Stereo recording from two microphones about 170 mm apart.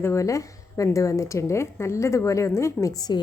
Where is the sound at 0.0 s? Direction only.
15° left (ahead or behind).